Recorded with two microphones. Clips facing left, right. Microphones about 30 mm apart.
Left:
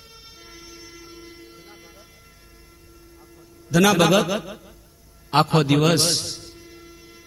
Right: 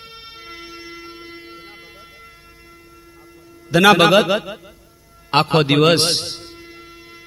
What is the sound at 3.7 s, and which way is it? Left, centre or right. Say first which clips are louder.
A man's voice: right 5 dB; right.